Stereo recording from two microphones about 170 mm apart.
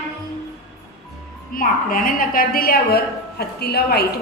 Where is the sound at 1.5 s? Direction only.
55° left (ahead or behind).